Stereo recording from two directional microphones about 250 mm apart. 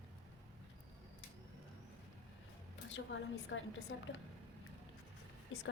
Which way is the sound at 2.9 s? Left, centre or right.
Left.